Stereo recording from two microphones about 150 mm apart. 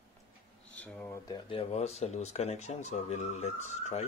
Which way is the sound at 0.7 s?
10° left (ahead or behind).